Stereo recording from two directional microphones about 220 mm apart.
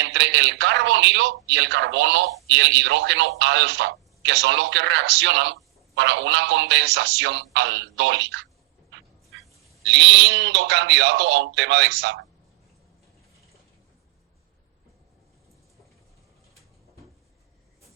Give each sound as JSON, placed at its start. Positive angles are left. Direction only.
{"t": 0.0, "sound": "speech", "side_deg": -55}
{"t": 9.8, "sound": "speech", "side_deg": -55}